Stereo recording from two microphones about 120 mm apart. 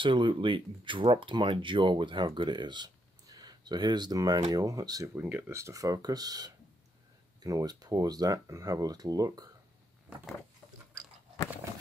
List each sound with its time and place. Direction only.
0.0 s speech: 45° right (ahead or behind)
5.1 s speech: 10° right (ahead or behind)
5.5 s speech: 25° right (ahead or behind)